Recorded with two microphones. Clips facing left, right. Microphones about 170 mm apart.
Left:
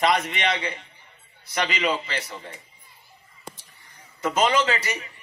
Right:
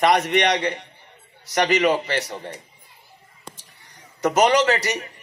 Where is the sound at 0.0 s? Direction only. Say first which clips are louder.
Right 5 dB; 45° right (ahead or behind).